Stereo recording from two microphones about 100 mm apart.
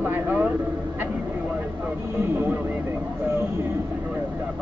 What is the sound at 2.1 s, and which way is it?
Speech, 25° right (ahead or behind).